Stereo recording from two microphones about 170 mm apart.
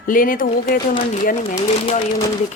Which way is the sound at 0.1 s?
55° left (ahead or behind).